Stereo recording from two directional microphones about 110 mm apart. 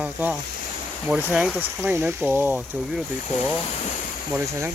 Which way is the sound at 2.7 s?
5° right (ahead or behind).